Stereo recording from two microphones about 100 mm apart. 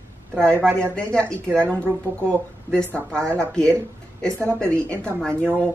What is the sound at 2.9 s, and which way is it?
Speech, 10° left (ahead or behind).